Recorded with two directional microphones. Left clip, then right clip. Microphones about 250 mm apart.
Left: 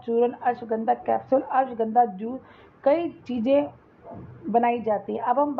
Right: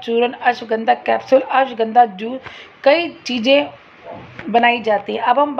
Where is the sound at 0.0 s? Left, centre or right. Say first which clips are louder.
Right 7 dB; centre.